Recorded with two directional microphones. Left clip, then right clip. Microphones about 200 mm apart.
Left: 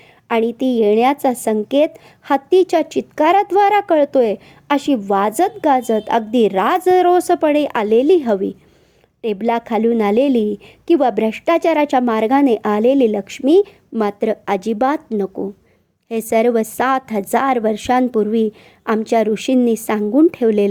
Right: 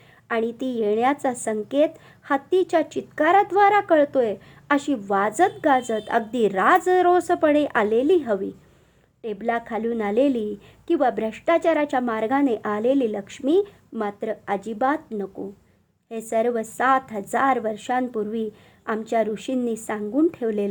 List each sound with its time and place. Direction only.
0.3 s a woman's voice: 25° left (ahead or behind)